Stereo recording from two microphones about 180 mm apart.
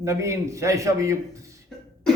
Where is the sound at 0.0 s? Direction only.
15° right (ahead or behind).